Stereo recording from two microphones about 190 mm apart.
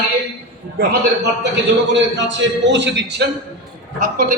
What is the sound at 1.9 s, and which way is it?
A man's voice, 70° right (ahead or behind).